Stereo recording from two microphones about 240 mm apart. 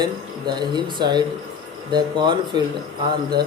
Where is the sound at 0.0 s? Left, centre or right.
Centre.